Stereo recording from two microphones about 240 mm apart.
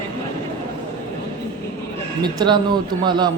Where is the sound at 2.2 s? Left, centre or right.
Centre.